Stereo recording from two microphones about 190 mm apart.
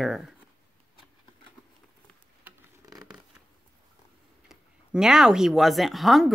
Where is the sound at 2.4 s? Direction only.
20° right (ahead or behind).